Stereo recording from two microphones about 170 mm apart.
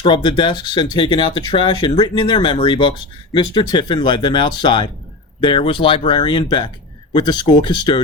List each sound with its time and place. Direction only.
0.0 s speech: 25° left (ahead or behind)